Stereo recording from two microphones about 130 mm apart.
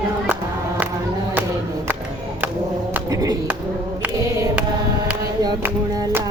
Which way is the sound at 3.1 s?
25° right (ahead or behind).